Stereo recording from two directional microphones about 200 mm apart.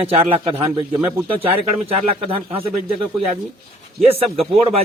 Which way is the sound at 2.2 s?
25° right (ahead or behind).